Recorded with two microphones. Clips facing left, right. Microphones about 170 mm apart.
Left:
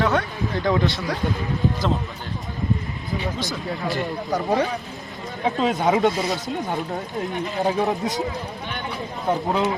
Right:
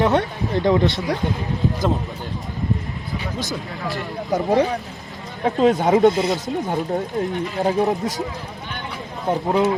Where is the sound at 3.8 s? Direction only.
Centre (ahead or behind).